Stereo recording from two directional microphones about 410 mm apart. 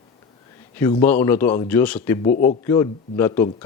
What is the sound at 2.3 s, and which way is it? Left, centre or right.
Speech, left.